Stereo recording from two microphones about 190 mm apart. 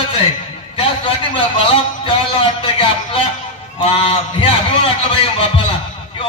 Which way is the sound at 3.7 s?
30° left (ahead or behind).